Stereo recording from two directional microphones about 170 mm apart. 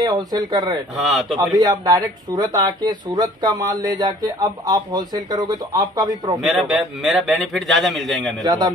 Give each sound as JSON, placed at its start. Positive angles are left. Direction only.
{"t": 0.0, "sound": "speech", "side_deg": -20}
{"t": 1.0, "sound": "a man's voice", "side_deg": 0}
{"t": 1.6, "sound": "speech", "side_deg": -20}
{"t": 6.4, "sound": "a man's voice", "side_deg": 0}
{"t": 8.4, "sound": "speech", "side_deg": -25}